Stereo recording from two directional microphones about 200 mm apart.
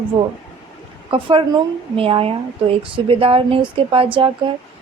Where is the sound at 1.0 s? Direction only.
25° right (ahead or behind).